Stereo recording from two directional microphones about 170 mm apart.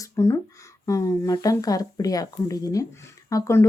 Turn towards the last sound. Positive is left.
turn(degrees=15)  # may be behind; listen again after turning